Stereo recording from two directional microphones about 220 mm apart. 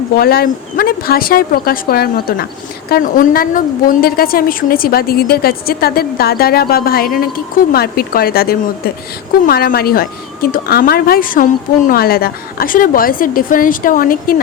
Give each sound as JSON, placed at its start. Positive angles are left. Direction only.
{"t": 0.2, "sound": "a woman's voice", "side_deg": 45}